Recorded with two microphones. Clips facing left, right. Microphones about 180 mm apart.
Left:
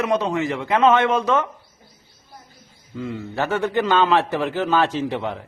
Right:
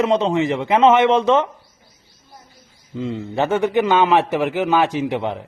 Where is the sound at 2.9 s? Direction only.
20° right (ahead or behind).